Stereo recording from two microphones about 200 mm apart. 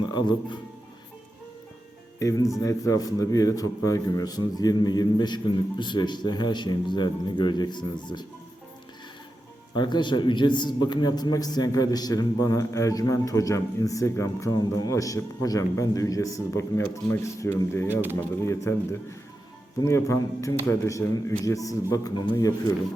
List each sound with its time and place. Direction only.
0.1 s a man's voice: 20° left (ahead or behind)
2.1 s a man's voice: 15° left (ahead or behind)
9.7 s a man's voice: 25° left (ahead or behind)
17.8 s speech: 10° right (ahead or behind)
18.2 s a man's voice: 15° left (ahead or behind)